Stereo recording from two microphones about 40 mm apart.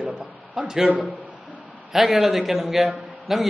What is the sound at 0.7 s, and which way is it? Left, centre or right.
A man's voice, centre.